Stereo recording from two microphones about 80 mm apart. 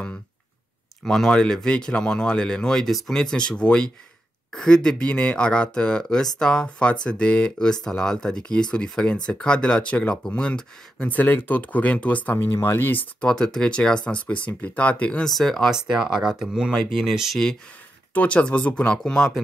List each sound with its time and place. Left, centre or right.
1.0 s speech: centre
12.4 s speech: left
13.3 s speech: centre
18.1 s speech: centre